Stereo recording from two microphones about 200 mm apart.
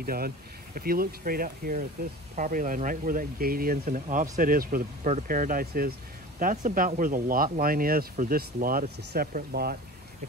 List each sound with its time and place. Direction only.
0.0 s speech: 50° right (ahead or behind)